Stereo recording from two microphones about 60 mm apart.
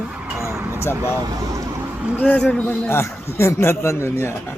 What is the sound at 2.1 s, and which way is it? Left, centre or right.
Speech, left.